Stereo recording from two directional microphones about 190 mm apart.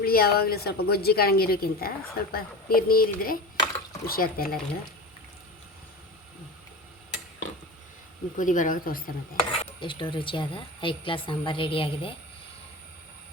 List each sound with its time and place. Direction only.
0.0 s a woman's voice: 50° left (ahead or behind)
8.4 s a woman's voice: 45° left (ahead or behind)
9.4 s speech: 25° left (ahead or behind)